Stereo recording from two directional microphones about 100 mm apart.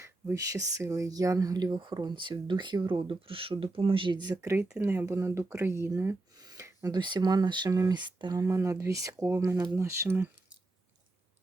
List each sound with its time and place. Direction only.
0.0 s speech: 35° right (ahead or behind)
3.1 s speech: 65° right (ahead or behind); by 4.4 s 45° right (ahead or behind)
4.8 s speech: 25° right (ahead or behind)
6.4 s a sound: 35° right (ahead or behind)
6.9 s speech: 45° right (ahead or behind)
8.4 s speech: 30° right (ahead or behind)